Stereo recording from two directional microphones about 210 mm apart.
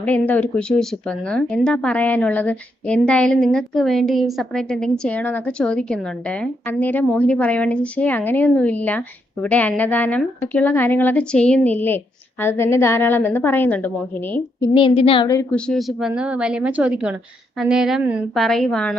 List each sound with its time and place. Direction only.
0.0 s speech: 5° left (ahead or behind)
14.7 s a woman's voice: 25° left (ahead or behind)
15.5 s a woman's voice: 5° left (ahead or behind)